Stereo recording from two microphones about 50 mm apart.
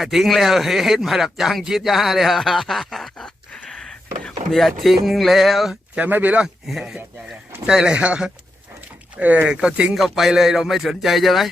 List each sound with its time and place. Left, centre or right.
0.0 s speech: centre
3.2 s a sound: centre
4.5 s speech: centre
6.1 s speech: right
6.7 s speech: centre
9.2 s speech: right
9.5 s speech: centre
9.9 s speech: centre